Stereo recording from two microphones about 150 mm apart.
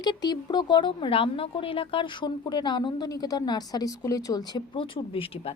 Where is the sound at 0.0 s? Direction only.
30° left (ahead or behind).